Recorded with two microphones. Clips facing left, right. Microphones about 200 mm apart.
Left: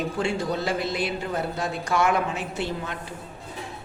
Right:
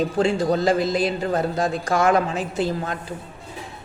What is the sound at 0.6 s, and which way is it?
Music, 90° right.